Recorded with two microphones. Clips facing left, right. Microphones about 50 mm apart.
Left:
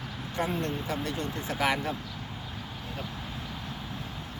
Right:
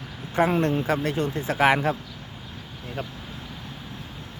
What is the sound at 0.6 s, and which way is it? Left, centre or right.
Speech, right.